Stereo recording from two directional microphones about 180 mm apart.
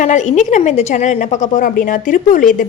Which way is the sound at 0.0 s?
40° left (ahead or behind).